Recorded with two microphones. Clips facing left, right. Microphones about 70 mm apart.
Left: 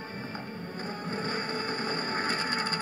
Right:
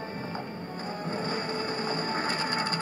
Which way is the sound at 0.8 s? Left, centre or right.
Left.